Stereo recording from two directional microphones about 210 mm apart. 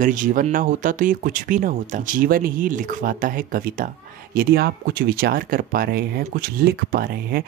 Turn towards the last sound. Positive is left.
turn(degrees=-45)  # may be behind; listen again after turning